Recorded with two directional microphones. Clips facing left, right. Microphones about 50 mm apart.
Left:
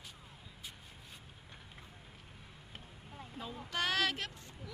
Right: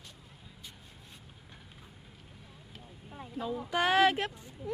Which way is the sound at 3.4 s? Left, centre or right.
Centre.